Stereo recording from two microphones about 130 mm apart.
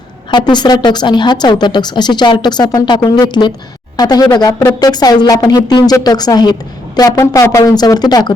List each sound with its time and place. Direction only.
0.3 s speech: 35° left (ahead or behind)